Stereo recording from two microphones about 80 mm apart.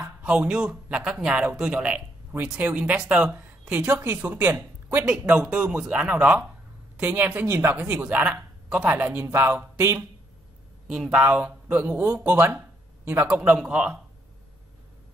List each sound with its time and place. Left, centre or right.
0.5 s speech: centre
5.0 s speech: centre; by 9.9 s right
10.9 s speech: centre
11.1 s speech: centre